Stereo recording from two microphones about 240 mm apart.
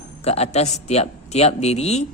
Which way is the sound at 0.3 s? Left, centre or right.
Left.